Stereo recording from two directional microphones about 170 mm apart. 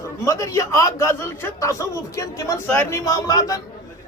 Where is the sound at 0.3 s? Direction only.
20° left (ahead or behind).